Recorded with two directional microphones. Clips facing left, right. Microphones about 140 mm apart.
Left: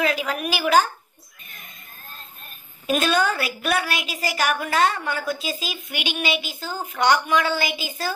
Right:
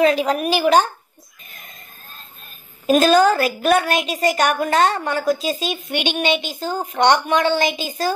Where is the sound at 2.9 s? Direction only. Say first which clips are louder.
Right 8 dB; 35° right (ahead or behind).